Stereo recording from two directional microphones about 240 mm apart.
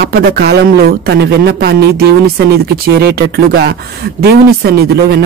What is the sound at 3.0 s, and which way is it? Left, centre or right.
Speech, right.